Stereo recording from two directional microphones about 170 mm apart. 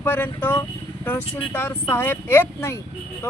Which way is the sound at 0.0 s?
10° left (ahead or behind).